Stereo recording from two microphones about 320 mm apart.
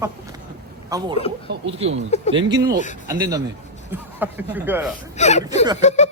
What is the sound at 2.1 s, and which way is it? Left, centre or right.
Speech, left.